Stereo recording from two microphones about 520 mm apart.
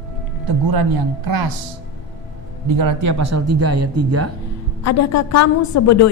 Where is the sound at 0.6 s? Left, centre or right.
Right.